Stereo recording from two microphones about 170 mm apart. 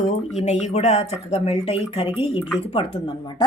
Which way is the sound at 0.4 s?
40° left (ahead or behind).